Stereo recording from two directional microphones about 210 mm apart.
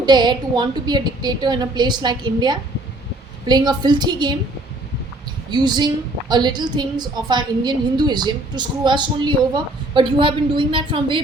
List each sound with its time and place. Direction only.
0.0 s a woman's voice: 20° right (ahead or behind)
5.5 s a woman's voice: 20° right (ahead or behind)